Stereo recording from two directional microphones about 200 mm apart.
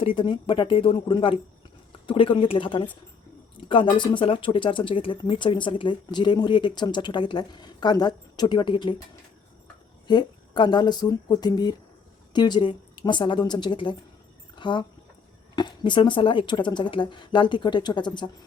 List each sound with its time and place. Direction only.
0.0 s speech: 25° left (ahead or behind)
10.1 s speech: 20° left (ahead or behind)